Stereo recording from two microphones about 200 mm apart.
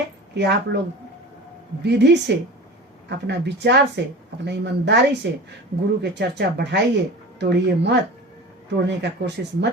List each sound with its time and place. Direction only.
0.3 s speech: 55° right (ahead or behind)
1.8 s speech: 60° right (ahead or behind)